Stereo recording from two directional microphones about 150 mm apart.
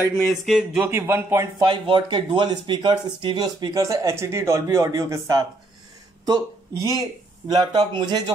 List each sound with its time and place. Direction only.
0.1 s speech: centre (ahead or behind)
0.8 s speech: 15° right (ahead or behind)
1.6 s speech: 35° right (ahead or behind)